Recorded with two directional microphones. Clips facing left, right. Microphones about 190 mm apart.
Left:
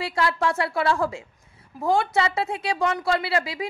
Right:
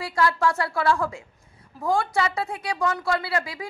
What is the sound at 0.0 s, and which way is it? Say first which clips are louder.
A woman's voice: right 1 dB; 25° left (ahead or behind).